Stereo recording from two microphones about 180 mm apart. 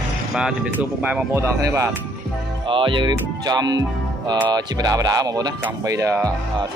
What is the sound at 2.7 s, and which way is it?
Speech, 30° right (ahead or behind).